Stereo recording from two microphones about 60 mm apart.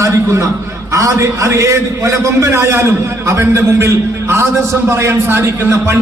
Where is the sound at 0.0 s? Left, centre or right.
Right.